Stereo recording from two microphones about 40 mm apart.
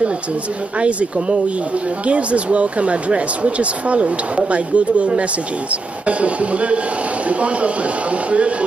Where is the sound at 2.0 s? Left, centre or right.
Right.